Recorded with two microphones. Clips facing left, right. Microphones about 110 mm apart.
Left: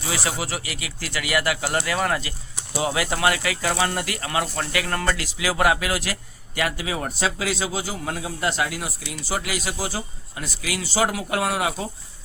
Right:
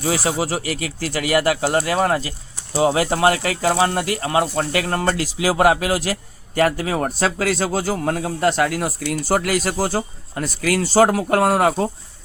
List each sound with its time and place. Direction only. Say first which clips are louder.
0.0 s a man's voice: right 7 dB; 40° right (ahead or behind)